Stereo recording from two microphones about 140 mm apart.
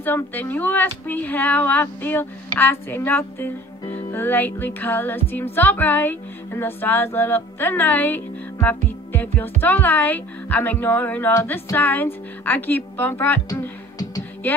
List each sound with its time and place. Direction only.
0.0 s music: 15° left (ahead or behind)
13.5 s music: 25° left (ahead or behind)